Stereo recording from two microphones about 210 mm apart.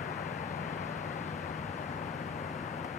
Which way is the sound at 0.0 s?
40° left (ahead or behind).